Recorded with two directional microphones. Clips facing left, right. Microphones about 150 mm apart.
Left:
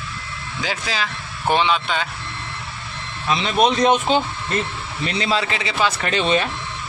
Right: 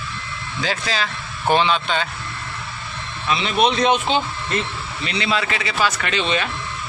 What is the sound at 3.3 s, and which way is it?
Speech, 40° left (ahead or behind).